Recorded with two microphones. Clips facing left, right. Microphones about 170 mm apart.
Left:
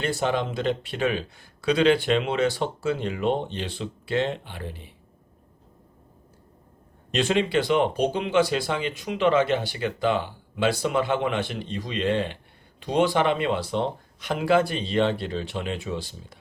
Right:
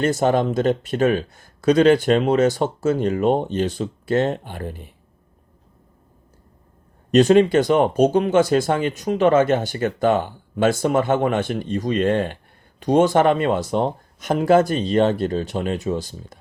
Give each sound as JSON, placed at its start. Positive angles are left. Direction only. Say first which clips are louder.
{"t": 0.0, "sound": "speech", "louder": "right 7 dB", "side_deg": -45}
{"t": 7.1, "sound": "speech", "louder": "right 9 dB", "side_deg": -45}